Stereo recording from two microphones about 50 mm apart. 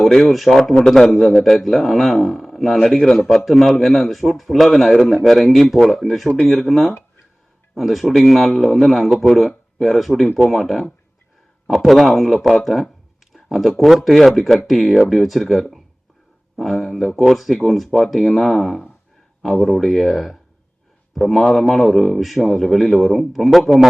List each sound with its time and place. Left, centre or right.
0.0 s speech: centre